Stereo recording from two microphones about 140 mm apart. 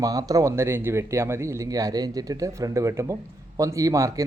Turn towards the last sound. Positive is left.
turn(degrees=-25)  # may be behind; listen again after turning